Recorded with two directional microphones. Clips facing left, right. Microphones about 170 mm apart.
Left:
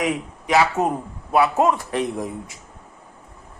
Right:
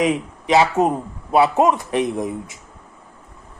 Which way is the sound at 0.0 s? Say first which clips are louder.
Right 4 dB; 20° right (ahead or behind).